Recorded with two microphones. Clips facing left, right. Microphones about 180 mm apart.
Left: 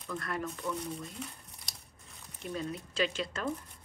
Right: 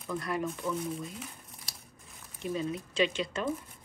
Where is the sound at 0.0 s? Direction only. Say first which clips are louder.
Right 4 dB; 5° right (ahead or behind).